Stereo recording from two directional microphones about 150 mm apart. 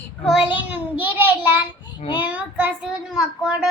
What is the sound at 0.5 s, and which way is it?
A child's voice, 10° right (ahead or behind).